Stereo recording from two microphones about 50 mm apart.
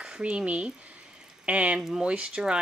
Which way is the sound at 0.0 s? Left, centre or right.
Right.